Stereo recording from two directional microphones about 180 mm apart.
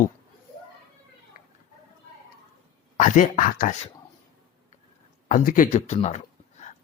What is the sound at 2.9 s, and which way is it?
Speech, 45° left (ahead or behind).